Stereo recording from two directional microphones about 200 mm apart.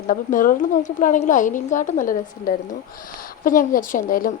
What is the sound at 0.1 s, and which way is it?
A woman's voice, 45° left (ahead or behind).